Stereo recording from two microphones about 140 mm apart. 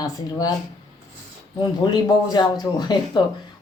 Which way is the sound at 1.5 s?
30° left (ahead or behind).